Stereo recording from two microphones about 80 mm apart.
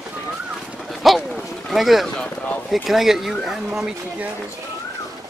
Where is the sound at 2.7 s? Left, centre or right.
Centre.